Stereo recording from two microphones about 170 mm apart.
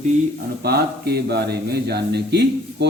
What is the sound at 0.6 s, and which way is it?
Speech, 70° right (ahead or behind).